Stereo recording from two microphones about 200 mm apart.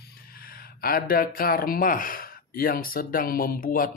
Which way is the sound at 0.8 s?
50° left (ahead or behind).